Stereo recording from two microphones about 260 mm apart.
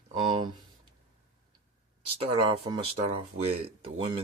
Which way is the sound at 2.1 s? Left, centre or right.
Right.